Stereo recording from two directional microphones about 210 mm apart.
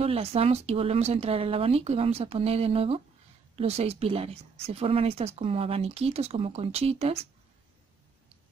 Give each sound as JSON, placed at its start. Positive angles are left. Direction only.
{"t": 0.0, "sound": "speech", "side_deg": -30}